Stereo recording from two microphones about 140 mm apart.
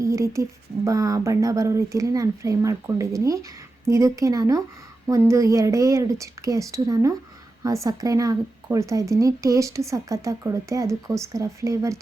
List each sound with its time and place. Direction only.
0.0 s speech: 20° right (ahead or behind)